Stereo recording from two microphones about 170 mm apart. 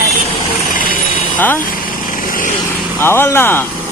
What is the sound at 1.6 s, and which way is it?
Vehicle, 55° left (ahead or behind).